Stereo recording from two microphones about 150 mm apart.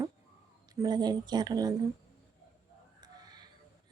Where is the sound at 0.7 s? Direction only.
25° right (ahead or behind).